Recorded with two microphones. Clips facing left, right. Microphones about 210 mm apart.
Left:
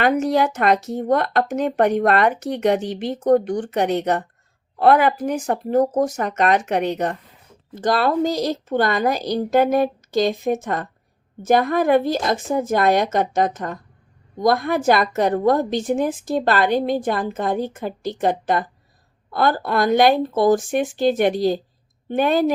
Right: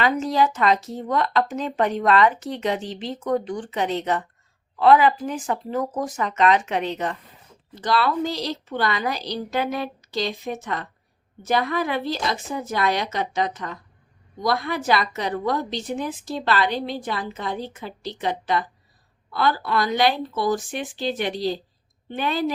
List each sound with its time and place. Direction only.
0.0 s a woman's voice: 55° left (ahead or behind)
5.5 s a woman's voice: 40° left (ahead or behind)